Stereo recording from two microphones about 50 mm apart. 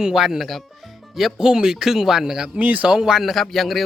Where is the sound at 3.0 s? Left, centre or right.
Centre.